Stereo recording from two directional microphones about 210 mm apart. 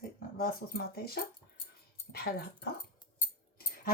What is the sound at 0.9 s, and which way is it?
Speech, 45° left (ahead or behind).